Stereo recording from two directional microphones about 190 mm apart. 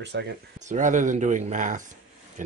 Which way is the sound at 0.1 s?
65° right (ahead or behind).